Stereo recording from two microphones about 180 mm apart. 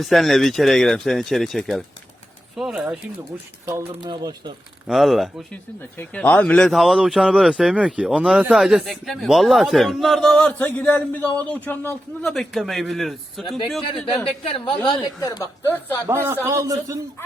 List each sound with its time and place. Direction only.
0.0 s a man's voice: centre (ahead or behind); by 4.5 s 25° right (ahead or behind)
4.9 s a man's voice: centre (ahead or behind)
14.3 s a woman's voice: 30° left (ahead or behind)
16.0 s speech: 15° right (ahead or behind)